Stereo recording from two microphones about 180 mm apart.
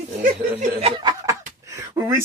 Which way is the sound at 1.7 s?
15° right (ahead or behind).